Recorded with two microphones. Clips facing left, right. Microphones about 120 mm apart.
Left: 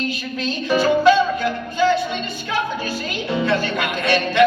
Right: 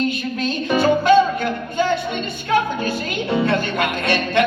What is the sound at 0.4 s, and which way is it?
Music, 55° right (ahead or behind).